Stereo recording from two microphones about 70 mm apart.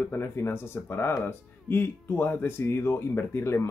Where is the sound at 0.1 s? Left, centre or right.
Left.